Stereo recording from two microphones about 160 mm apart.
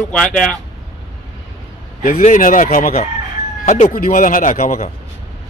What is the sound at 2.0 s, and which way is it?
Speech, 60° left (ahead or behind).